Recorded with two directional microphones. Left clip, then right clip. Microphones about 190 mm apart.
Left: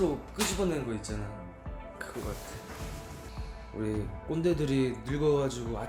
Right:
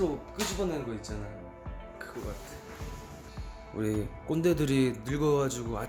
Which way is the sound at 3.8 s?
40° right (ahead or behind).